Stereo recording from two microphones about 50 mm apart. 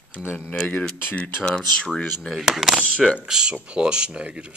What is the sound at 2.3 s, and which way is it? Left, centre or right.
Speech, centre.